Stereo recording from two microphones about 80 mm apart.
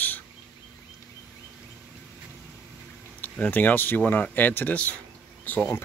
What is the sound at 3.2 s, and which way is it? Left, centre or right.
Speech, centre.